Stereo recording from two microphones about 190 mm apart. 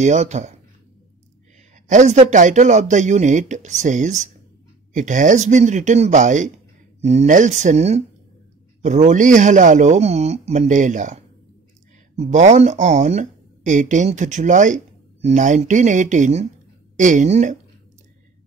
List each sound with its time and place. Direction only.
0.0 s speech: 40° right (ahead or behind)
1.9 s speech: 40° right (ahead or behind)
12.2 s speech: 40° right (ahead or behind)